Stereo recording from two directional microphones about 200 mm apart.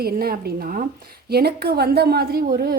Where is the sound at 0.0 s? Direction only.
50° right (ahead or behind).